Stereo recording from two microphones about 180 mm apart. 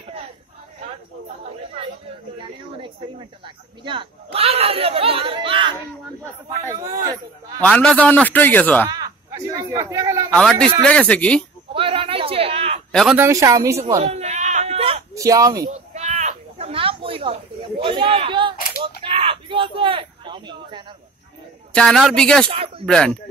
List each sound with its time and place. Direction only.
2.8 s speech: 25° right (ahead or behind)
6.7 s a woman's voice: 15° right (ahead or behind)
7.6 s a man's voice: 5° left (ahead or behind)
8.9 s a sound: 20° right (ahead or behind)
10.3 s speech: 5° left (ahead or behind)
11.7 s a sound: 30° right (ahead or behind)
12.9 s speech: centre (ahead or behind)
13.2 s a woman's voice: 15° right (ahead or behind)
13.9 s a sound: 35° right (ahead or behind)
15.1 s speech: 20° right (ahead or behind)
15.7 s a sound: 40° right (ahead or behind)
21.7 s speech: 5° left (ahead or behind)
22.5 s speech: 30° right (ahead or behind)
22.8 s speech: 5° left (ahead or behind)